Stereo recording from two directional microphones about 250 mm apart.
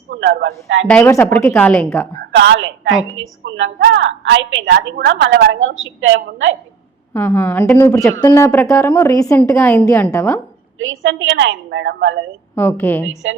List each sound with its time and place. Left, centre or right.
0.1 s speech: right
0.9 s a woman's voice: centre
2.3 s a woman's voice: right
7.1 s a woman's voice: centre
10.8 s a woman's voice: right
12.5 s a woman's voice: centre